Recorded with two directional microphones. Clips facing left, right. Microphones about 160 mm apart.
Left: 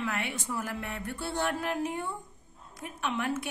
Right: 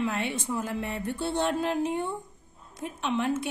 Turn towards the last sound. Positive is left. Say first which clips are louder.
# right 4 dB
turn(degrees=-25)  # may be behind; listen again after turning